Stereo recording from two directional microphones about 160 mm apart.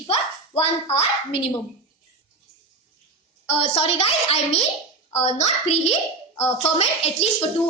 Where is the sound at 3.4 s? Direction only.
40° left (ahead or behind).